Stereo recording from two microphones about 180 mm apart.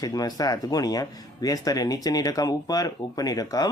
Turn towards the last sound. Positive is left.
turn(degrees=20)  # may be behind; listen again after turning